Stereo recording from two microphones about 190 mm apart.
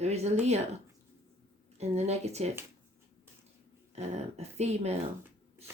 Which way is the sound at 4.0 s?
35° right (ahead or behind).